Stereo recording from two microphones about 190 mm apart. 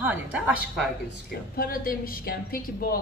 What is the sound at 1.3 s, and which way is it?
Speech, 50° left (ahead or behind).